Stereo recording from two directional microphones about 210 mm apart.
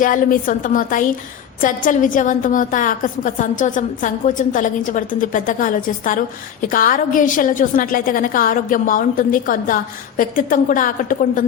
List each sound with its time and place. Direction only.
0.0 s a woman's voice: 40° left (ahead or behind)